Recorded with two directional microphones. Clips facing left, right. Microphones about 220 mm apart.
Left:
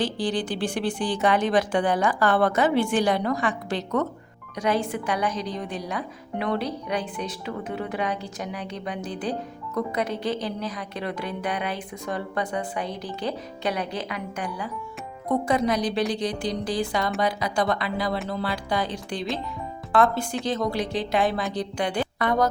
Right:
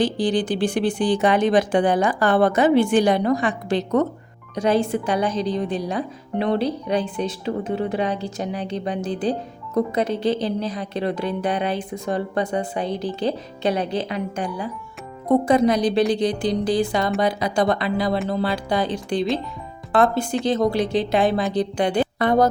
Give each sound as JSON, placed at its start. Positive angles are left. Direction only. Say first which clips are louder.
{"t": 0.0, "sound": "a woman's voice", "louder": "right 5 dB", "side_deg": -15}